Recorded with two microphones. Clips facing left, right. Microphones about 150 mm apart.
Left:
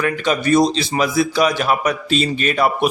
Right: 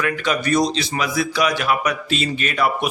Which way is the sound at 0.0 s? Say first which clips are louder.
Left 3 dB; 30° left (ahead or behind).